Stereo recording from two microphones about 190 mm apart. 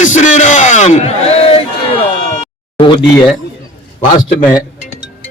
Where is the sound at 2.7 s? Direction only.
25° left (ahead or behind).